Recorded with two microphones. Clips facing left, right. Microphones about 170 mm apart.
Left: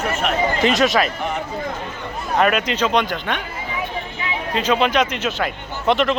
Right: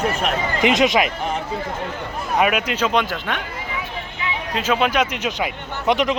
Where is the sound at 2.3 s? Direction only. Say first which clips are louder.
Left 1 dB; 10° right (ahead or behind).